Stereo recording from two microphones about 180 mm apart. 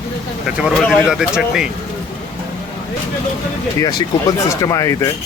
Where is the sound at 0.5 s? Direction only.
5° right (ahead or behind).